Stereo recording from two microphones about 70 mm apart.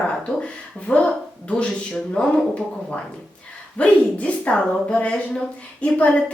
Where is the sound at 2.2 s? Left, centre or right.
Centre.